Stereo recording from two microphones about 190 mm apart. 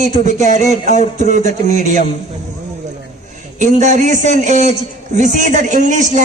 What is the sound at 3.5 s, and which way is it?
A man's voice, 40° right (ahead or behind).